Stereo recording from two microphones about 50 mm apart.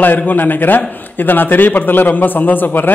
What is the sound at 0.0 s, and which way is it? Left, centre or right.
A man's voice, left.